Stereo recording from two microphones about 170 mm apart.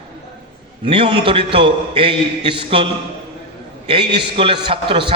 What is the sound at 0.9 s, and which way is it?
A man's voice, 30° right (ahead or behind).